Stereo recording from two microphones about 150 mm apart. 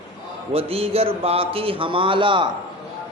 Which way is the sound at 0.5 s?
40° right (ahead or behind).